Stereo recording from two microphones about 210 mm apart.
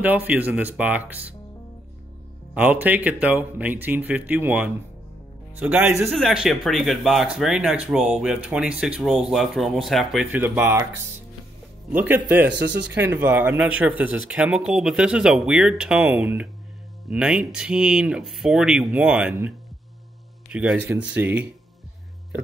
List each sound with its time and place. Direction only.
0.0 s speech: 10° right (ahead or behind)
2.5 s speech: 10° right (ahead or behind)
11.9 s speech: 10° right (ahead or behind)
12.4 s speech: 55° right (ahead or behind)
13.0 s speech: 10° right (ahead or behind)
20.5 s speech: 5° right (ahead or behind)